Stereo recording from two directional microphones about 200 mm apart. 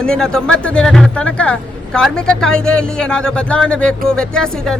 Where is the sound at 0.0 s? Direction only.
5° left (ahead or behind).